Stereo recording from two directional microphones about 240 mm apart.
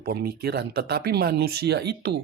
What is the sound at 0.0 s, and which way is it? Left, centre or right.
Speech, right.